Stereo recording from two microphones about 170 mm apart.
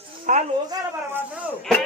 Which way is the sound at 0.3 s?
50° right (ahead or behind).